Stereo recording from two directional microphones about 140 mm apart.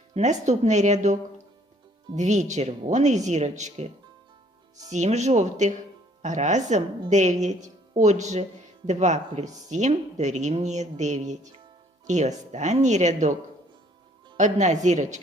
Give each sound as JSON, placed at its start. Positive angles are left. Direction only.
{"t": 0.1, "sound": "speech", "side_deg": -55}
{"t": 4.9, "sound": "speech", "side_deg": -55}
{"t": 14.3, "sound": "speech", "side_deg": -60}